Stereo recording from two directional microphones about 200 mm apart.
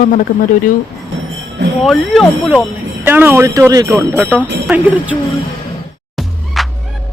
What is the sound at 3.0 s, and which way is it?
Speech, 10° right (ahead or behind).